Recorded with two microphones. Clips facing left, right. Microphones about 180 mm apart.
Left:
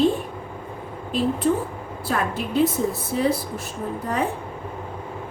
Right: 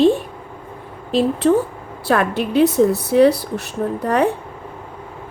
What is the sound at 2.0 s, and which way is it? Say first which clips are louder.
A woman's voice: right 7 dB; 75° right (ahead or behind).